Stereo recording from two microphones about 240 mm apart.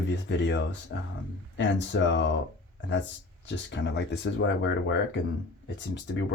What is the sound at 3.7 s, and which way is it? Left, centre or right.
Speech, left.